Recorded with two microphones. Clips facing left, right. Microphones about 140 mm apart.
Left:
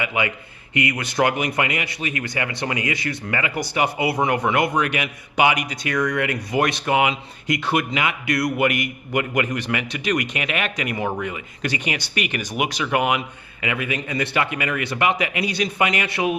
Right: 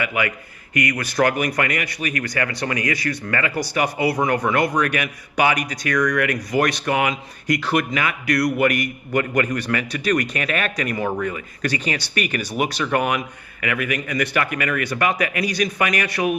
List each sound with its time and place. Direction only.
0.0 s a man's voice: 20° left (ahead or behind)